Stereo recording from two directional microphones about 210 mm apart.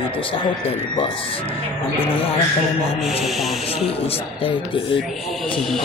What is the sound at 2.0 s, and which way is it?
Speech, 25° left (ahead or behind).